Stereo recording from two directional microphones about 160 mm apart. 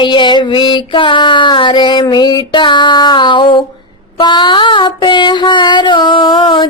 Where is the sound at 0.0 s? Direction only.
30° left (ahead or behind).